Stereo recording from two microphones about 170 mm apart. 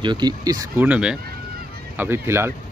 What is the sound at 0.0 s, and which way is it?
Speech, 25° right (ahead or behind).